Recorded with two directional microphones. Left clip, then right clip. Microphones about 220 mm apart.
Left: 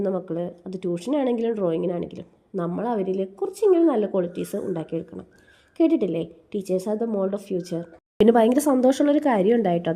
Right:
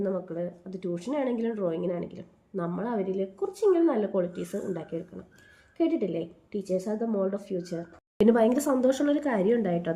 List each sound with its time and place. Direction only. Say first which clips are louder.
0.0 s speech: left 5 dB; 35° left (ahead or behind)